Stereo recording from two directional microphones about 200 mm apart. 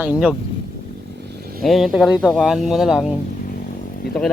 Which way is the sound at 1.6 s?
Centre (ahead or behind).